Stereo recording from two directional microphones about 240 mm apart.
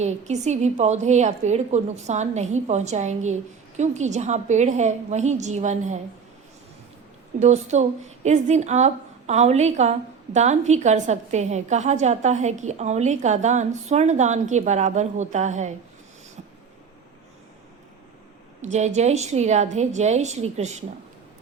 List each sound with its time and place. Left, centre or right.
0.0 s a woman's voice: right
7.3 s a woman's voice: right
18.6 s a woman's voice: right